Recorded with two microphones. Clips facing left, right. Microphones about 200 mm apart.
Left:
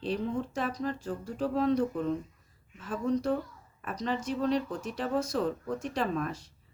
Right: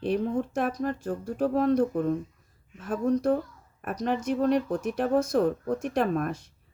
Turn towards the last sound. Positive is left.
turn(degrees=-55)  # may be behind; listen again after turning